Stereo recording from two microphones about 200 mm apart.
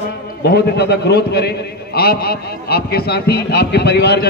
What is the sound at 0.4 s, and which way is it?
A man's voice, 55° left (ahead or behind).